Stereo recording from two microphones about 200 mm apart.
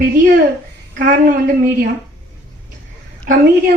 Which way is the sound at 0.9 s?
45° right (ahead or behind).